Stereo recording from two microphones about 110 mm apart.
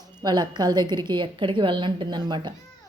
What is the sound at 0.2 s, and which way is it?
A woman's voice, 40° right (ahead or behind).